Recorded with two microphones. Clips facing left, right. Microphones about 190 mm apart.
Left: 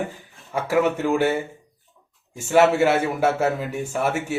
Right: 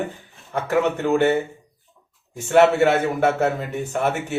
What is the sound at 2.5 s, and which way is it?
A man's voice, 5° left (ahead or behind).